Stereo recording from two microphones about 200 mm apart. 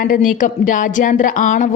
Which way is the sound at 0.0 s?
45° left (ahead or behind).